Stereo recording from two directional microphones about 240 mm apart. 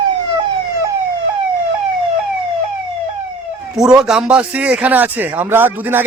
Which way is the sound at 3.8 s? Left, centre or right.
Centre.